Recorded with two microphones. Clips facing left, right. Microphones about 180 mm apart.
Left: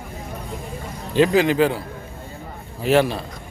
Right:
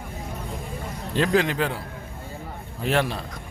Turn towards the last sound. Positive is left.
turn(degrees=5)  # may be behind; listen again after turning